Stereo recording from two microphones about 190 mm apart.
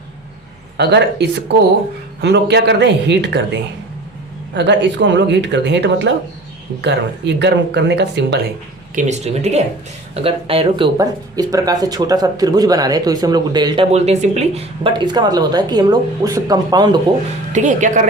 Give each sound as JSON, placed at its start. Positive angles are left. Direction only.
{"t": 0.8, "sound": "speech", "side_deg": -60}
{"t": 9.0, "sound": "speech", "side_deg": -35}
{"t": 13.9, "sound": "speech", "side_deg": -35}
{"t": 14.8, "sound": "speech", "side_deg": -25}
{"t": 17.5, "sound": "speech", "side_deg": -40}